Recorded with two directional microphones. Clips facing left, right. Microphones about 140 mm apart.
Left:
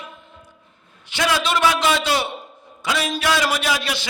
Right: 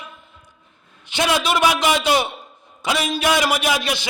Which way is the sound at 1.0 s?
20° right (ahead or behind).